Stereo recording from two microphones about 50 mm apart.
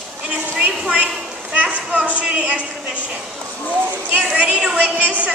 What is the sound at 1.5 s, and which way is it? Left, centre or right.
A woman's voice, right.